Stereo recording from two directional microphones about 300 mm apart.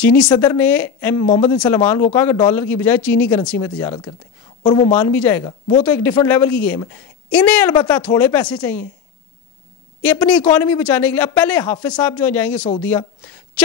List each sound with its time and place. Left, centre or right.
0.0 s a woman's voice: centre
10.0 s a woman's voice: centre